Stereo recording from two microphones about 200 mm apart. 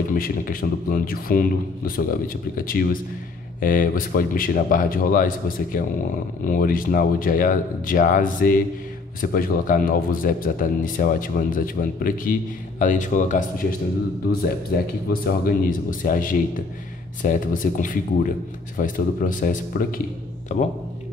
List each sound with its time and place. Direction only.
0.1 s speech: 45° left (ahead or behind)
15.2 s speech: 45° left (ahead or behind)